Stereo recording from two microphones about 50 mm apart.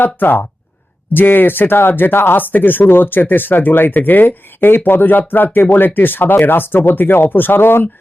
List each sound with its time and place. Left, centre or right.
0.0 s speech: left